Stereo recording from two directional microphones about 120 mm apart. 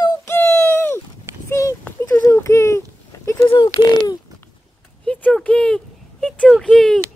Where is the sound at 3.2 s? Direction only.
25° left (ahead or behind).